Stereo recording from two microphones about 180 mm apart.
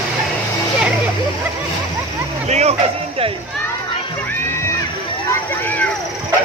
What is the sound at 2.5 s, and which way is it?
Music, 35° right (ahead or behind).